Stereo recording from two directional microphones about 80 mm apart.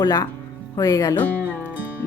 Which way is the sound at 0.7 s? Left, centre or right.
Left.